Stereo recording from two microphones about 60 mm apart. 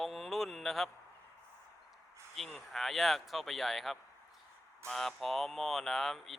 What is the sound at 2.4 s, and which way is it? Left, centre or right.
Speech, centre.